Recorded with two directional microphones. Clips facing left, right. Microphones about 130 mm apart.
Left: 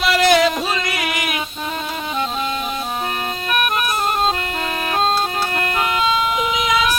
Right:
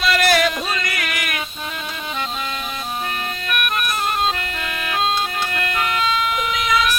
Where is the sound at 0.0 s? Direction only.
20° left (ahead or behind).